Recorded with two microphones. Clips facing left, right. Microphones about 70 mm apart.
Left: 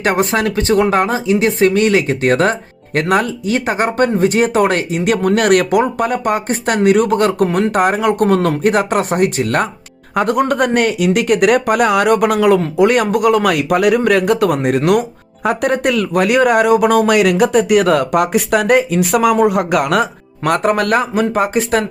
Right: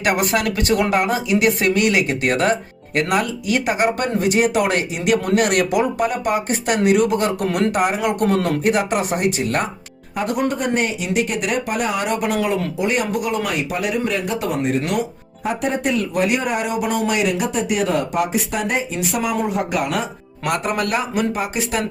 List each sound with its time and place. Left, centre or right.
0.0 s speech: left
20.4 s speech: left